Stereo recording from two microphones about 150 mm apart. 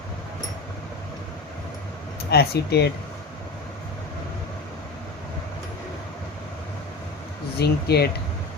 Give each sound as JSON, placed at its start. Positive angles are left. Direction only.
{"t": 2.3, "sound": "speech", "side_deg": 90}
{"t": 7.6, "sound": "speech", "side_deg": 90}